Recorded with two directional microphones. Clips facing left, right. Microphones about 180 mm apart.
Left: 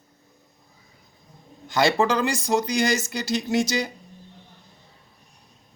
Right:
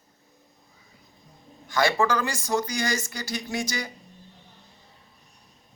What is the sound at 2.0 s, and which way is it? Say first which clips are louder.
Speech: left 3 dB; 20° left (ahead or behind).